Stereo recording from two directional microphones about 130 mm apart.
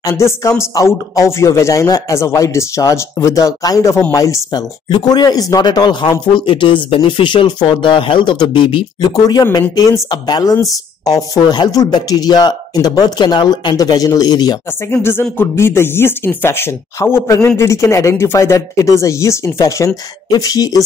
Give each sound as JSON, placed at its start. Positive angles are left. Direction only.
{"t": 0.1, "sound": "speech", "side_deg": 20}
{"t": 14.9, "sound": "speech", "side_deg": 20}